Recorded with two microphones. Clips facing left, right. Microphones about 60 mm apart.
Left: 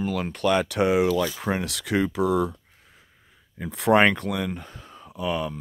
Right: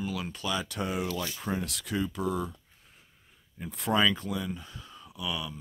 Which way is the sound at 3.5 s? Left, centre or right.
Left.